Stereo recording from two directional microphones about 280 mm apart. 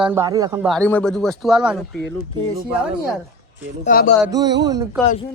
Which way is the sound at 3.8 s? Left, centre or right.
Left.